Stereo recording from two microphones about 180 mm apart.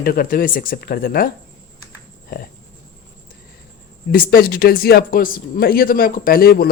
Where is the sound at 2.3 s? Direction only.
55° left (ahead or behind).